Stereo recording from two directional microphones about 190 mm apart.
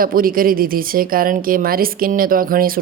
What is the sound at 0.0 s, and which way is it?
Speech, 50° right (ahead or behind).